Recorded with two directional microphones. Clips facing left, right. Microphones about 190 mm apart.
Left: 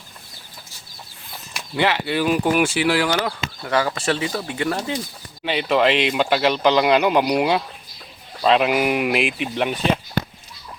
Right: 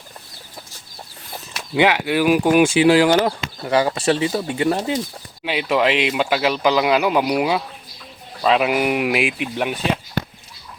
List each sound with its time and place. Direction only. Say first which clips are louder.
1.7 s speech: right 4 dB; 15° right (ahead or behind)
5.5 s speech: even; 5° right (ahead or behind)